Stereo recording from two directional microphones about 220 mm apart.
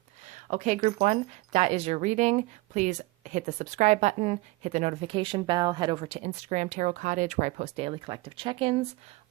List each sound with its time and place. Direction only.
0.3 s speech: 35° right (ahead or behind)